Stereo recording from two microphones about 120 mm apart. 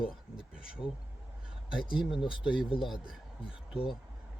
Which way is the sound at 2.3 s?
45° left (ahead or behind).